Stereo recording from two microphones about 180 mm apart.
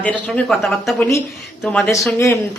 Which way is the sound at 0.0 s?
5° left (ahead or behind).